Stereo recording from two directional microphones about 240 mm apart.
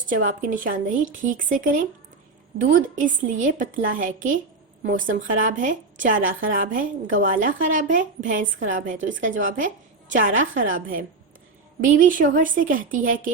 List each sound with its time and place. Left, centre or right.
0.3 s a woman's voice: right